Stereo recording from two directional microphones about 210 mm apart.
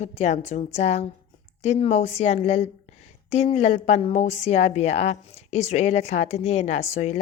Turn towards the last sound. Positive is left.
turn(degrees=35)  # may be behind; listen again after turning